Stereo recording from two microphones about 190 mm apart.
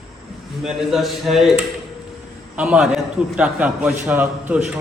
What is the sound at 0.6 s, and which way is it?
A man's voice, centre (ahead or behind).